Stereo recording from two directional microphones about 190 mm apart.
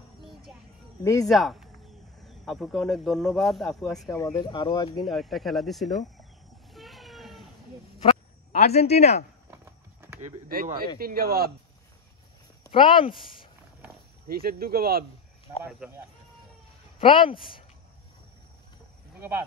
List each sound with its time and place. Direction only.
1.2 s speech: centre (ahead or behind)
4.1 s speech: 20° left (ahead or behind)
5.0 s speech: centre (ahead or behind)
6.7 s a sound: centre (ahead or behind)
8.0 s a sound: 30° left (ahead or behind)
10.5 s speech: 50° right (ahead or behind)
12.7 s speech: 25° left (ahead or behind)
14.2 s speech: 50° right (ahead or behind)
15.8 s speech: 5° right (ahead or behind)
17.0 s speech: 25° left (ahead or behind)
19.1 s cricket: 10° right (ahead or behind)